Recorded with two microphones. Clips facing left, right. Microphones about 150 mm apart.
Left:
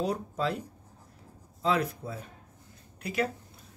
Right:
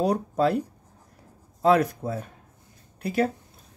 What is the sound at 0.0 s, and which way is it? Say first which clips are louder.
Speech: right 7 dB; 60° right (ahead or behind).